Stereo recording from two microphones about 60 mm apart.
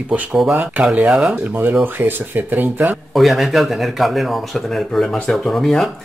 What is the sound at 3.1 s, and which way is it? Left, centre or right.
Speech, centre.